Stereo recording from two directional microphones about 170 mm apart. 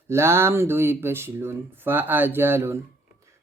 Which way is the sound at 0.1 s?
15° right (ahead or behind).